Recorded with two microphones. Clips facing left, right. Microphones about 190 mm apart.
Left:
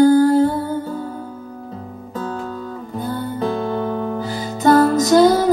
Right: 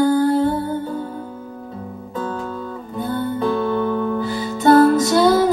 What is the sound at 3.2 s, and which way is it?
Music, 40° left (ahead or behind).